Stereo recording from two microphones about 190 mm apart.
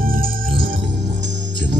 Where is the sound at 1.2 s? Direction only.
70° right (ahead or behind).